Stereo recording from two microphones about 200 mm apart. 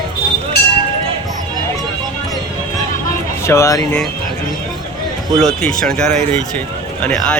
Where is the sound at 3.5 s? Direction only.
15° left (ahead or behind).